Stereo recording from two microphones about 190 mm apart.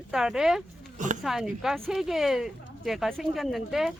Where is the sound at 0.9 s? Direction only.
40° right (ahead or behind).